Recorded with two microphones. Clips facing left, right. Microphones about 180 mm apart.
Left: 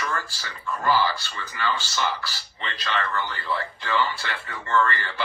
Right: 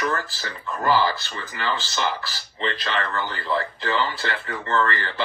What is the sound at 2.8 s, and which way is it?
Speech, 45° right (ahead or behind).